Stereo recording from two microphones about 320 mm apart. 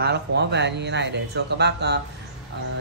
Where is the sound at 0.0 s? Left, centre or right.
Right.